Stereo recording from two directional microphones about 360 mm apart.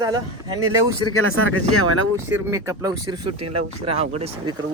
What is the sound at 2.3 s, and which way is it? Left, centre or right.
Speech, centre.